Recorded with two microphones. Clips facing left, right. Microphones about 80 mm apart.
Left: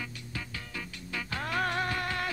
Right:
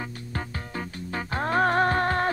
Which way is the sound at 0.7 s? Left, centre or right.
Right.